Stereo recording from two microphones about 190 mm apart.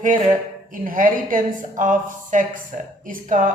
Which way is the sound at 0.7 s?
45° right (ahead or behind).